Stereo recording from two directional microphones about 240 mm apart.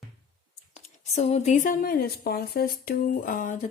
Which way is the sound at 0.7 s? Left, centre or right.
Left.